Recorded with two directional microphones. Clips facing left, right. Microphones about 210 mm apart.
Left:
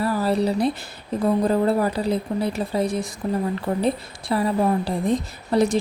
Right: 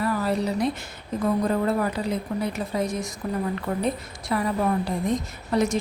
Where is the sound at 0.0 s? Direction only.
35° left (ahead or behind).